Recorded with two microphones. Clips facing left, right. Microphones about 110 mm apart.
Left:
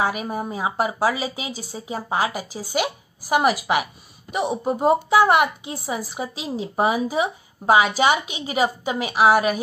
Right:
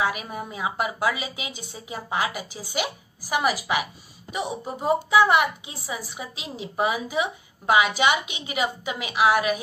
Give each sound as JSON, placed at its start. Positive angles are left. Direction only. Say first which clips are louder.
{"t": 0.0, "sound": "a woman's voice", "louder": "left 3 dB", "side_deg": 40}